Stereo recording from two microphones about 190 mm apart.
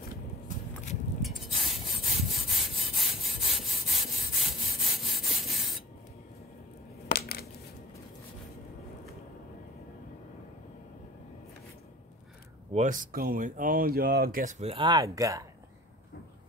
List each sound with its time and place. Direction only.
1.2 s sawing: centre (ahead or behind)
7.1 s coin: 55° left (ahead or behind)
12.7 s speech: 45° right (ahead or behind); by 15.4 s 15° right (ahead or behind)